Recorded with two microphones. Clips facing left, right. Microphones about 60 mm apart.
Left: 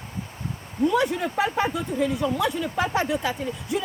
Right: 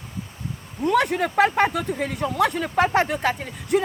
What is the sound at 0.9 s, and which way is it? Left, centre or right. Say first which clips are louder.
Speech: right 5 dB; right.